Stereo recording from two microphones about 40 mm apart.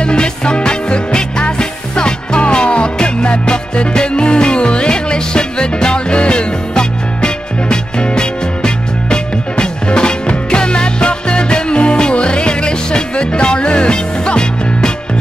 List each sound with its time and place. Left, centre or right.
0.0 s music: left